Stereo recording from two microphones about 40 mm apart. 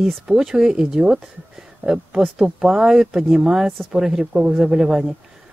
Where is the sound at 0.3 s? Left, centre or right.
Centre.